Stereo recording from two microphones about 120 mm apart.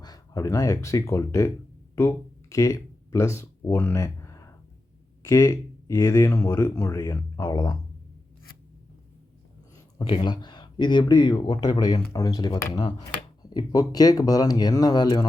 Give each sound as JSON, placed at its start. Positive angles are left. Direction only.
{"t": 0.0, "sound": "speech", "side_deg": 30}
{"t": 10.0, "sound": "speech", "side_deg": 45}
{"t": 12.7, "sound": "speech", "side_deg": 40}